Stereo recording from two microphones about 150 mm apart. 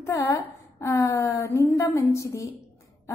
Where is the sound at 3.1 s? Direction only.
20° left (ahead or behind).